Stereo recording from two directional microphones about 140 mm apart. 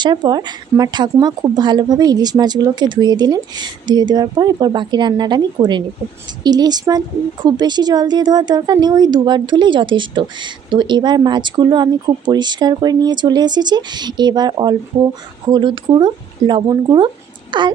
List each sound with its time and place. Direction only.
0.0 s a woman's voice: 35° right (ahead or behind)